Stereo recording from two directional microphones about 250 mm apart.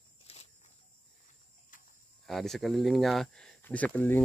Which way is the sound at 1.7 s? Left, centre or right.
Left.